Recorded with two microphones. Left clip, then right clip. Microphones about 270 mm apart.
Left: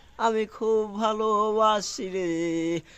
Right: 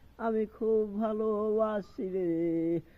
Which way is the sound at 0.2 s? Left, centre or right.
Centre.